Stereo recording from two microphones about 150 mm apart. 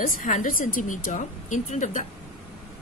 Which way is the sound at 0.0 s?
60° left (ahead or behind).